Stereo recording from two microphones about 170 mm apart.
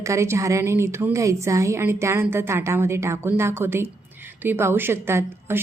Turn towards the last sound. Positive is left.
turn(degrees=-15)  # may be behind; listen again after turning